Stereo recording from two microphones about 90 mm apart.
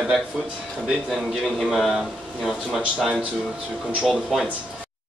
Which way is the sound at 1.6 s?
Centre (ahead or behind).